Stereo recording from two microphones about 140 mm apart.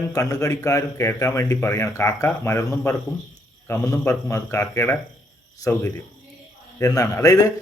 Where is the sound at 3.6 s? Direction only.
20° left (ahead or behind).